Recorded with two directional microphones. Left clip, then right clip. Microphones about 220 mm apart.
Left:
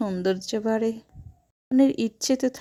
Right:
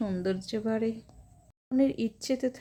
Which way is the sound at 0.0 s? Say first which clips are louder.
Left 6 dB; 30° left (ahead or behind).